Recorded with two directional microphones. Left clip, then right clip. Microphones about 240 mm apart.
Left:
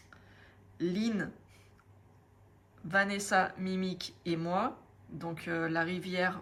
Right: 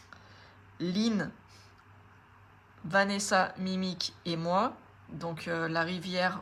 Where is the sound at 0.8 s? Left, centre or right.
Centre.